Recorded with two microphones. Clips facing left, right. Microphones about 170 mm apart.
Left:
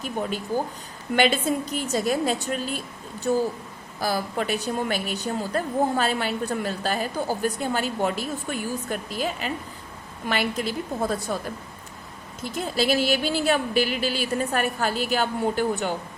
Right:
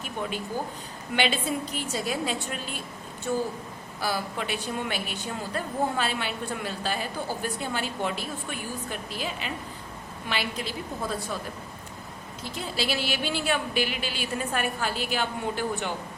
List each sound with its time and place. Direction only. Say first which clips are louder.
0.2 s a woman's voice: left 4 dB; 45° left (ahead or behind)
4.0 s a woman's voice: left 4 dB; 40° left (ahead or behind)
12.5 s speech: left 7 dB; 45° left (ahead or behind)